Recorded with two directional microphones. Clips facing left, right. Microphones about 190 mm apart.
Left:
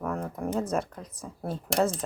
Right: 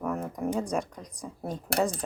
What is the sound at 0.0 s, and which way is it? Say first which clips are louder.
Speech: right 1 dB; 5° right (ahead or behind).